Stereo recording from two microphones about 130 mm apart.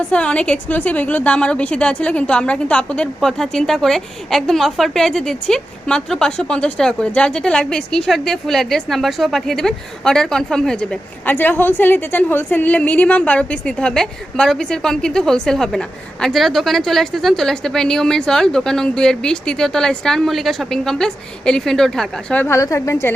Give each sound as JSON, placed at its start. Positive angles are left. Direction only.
{"t": 0.1, "sound": "a woman's voice", "side_deg": 10}
{"t": 11.3, "sound": "a woman's voice", "side_deg": 15}
{"t": 22.4, "sound": "a woman's voice", "side_deg": 20}